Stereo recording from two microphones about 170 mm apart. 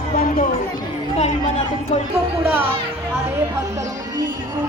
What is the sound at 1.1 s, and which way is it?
Chatter, 40° left (ahead or behind).